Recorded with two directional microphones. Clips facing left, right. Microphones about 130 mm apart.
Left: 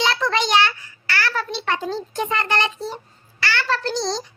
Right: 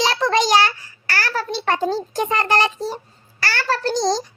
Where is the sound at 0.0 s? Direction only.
35° right (ahead or behind).